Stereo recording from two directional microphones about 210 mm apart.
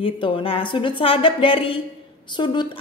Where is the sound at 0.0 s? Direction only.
25° left (ahead or behind).